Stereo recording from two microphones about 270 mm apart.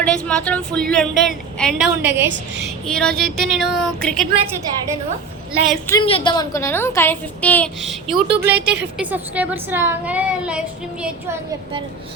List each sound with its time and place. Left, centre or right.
0.0 s a woman's voice: centre
5.6 s a woman's voice: centre
6.0 s a woman's voice: centre
8.5 s a woman's voice: right
9.0 s a woman's voice: centre